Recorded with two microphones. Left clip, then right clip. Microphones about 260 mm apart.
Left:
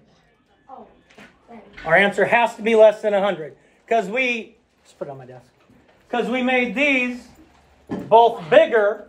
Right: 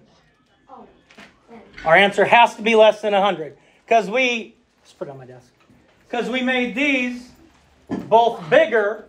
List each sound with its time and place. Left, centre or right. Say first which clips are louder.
1.9 s a man's voice: right 2 dB; centre
4.9 s a man's voice: even; centre
8.1 s speech: left 2 dB; centre